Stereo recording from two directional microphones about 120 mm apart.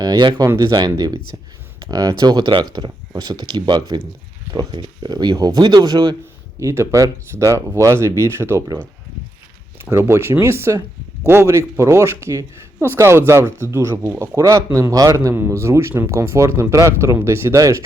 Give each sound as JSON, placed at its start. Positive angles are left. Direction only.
{"t": 0.0, "sound": "speech", "side_deg": -35}
{"t": 6.6, "sound": "speech", "side_deg": -25}
{"t": 9.8, "sound": "speech", "side_deg": -20}